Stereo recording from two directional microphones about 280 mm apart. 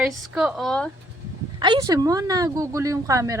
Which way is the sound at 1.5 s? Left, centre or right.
Centre.